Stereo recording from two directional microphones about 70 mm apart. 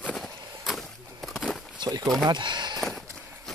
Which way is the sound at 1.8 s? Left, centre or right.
Right.